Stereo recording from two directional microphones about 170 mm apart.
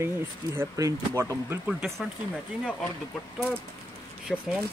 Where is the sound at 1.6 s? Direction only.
5° right (ahead or behind).